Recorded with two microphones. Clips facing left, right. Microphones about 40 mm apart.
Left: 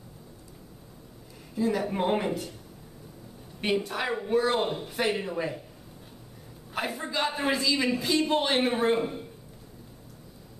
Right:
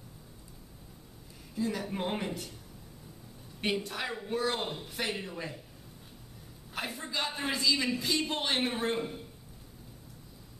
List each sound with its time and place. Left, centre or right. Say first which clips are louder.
1.5 s a man's voice: left 6 dB; centre
3.6 s a man's voice: left 5 dB; centre
6.7 s a man's voice: left 5 dB; centre